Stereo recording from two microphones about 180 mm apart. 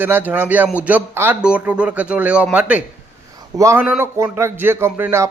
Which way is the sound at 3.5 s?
15° right (ahead or behind).